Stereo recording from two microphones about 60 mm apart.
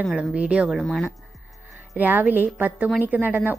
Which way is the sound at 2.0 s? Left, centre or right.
Right.